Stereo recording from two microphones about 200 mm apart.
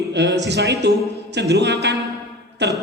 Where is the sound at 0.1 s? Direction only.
60° right (ahead or behind).